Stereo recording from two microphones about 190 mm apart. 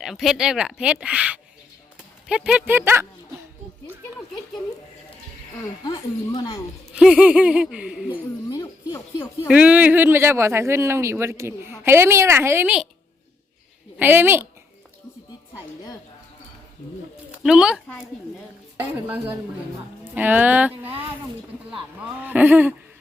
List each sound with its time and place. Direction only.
0.0 s speech: centre (ahead or behind)
5.8 s speech: 25° left (ahead or behind)
6.9 s speech: 5° right (ahead or behind)
8.1 s speech: 15° left (ahead or behind)
9.5 s speech: 5° right (ahead or behind)
14.0 s speech: 10° right (ahead or behind)
17.3 s speech: 5° right (ahead or behind)
18.8 s speech: 10° right (ahead or behind)
22.0 s speech: 10° right (ahead or behind)